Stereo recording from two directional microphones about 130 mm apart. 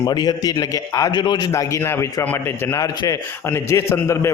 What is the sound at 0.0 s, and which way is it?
A man's voice, 30° left (ahead or behind).